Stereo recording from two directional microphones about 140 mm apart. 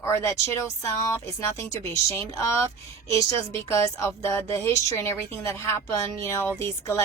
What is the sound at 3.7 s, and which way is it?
A woman's voice, 20° left (ahead or behind).